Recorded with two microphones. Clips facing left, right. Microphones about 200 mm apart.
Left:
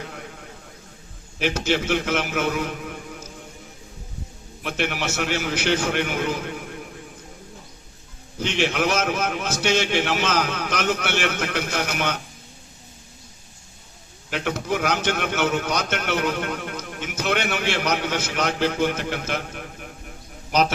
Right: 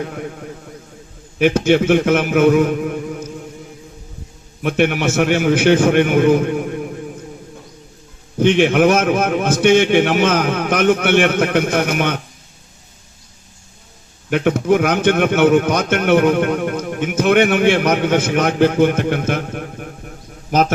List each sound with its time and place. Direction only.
0.0 s a man's voice: 50° right (ahead or behind)
4.6 s a man's voice: 55° right (ahead or behind)
8.4 s a man's voice: 55° right (ahead or behind)
14.3 s a man's voice: 55° right (ahead or behind)